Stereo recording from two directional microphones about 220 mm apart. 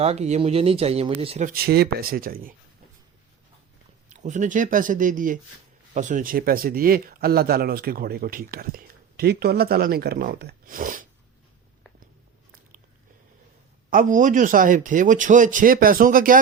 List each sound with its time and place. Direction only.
0.0 s speech: 30° right (ahead or behind)
4.1 s speech: 35° right (ahead or behind)
13.9 s speech: 35° right (ahead or behind)